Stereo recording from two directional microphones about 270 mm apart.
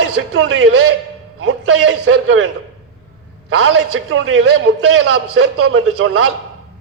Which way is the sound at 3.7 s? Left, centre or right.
Right.